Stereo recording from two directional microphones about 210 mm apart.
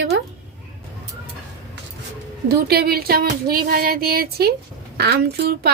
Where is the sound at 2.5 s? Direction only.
50° right (ahead or behind).